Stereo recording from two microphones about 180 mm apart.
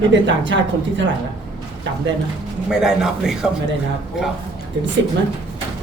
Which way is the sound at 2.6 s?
5° right (ahead or behind).